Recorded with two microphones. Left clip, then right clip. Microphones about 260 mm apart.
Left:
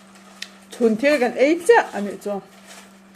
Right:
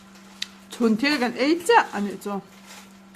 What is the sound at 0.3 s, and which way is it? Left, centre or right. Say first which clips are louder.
Speech: left 3 dB; right.